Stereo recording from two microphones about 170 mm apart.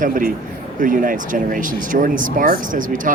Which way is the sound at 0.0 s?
55° right (ahead or behind).